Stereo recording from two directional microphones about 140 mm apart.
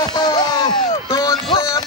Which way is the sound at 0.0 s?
30° left (ahead or behind).